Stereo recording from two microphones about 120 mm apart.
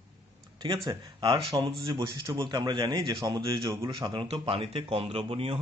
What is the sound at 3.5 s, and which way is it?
Speech, 45° right (ahead or behind).